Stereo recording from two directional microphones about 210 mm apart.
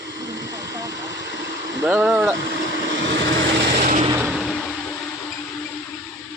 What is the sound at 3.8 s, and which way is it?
Vehicle, 40° right (ahead or behind).